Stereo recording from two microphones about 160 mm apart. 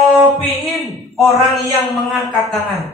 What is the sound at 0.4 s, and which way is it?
Music, 20° left (ahead or behind).